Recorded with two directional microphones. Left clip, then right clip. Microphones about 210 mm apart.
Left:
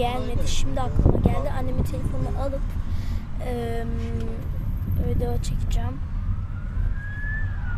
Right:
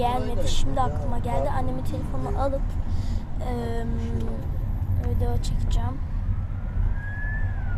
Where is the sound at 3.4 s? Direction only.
15° left (ahead or behind).